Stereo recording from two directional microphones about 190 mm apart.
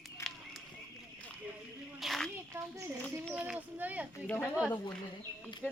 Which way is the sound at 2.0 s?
Centre (ahead or behind).